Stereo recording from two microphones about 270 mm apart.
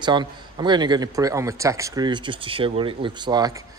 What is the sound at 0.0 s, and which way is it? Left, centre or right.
A man's voice, centre.